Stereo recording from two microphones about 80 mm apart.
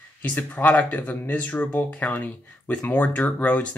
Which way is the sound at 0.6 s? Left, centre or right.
Left.